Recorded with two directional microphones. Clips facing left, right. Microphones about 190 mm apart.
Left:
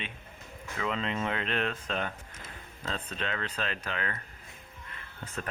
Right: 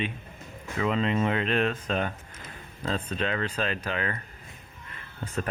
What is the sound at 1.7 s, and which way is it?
Speech, 50° right (ahead or behind).